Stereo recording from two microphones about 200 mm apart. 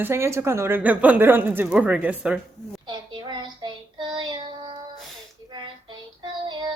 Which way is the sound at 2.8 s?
25° right (ahead or behind).